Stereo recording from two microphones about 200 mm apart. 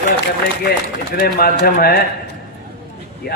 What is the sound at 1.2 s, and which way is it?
Speech, 50° left (ahead or behind).